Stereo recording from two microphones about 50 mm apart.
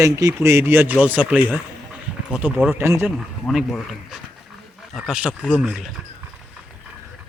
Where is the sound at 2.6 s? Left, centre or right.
Right.